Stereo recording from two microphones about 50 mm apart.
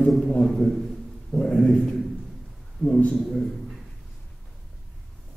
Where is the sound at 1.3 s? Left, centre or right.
Centre.